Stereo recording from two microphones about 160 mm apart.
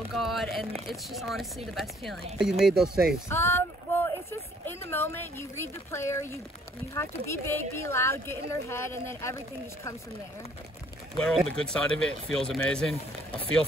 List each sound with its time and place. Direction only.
0.1 s speech: centre (ahead or behind)
3.3 s speech: 15° left (ahead or behind)
11.1 s speech: 5° left (ahead or behind)